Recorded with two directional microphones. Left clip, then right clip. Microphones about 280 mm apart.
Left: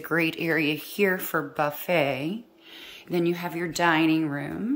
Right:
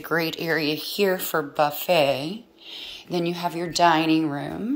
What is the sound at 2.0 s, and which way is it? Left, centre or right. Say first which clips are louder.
Speech: right 4 dB; left.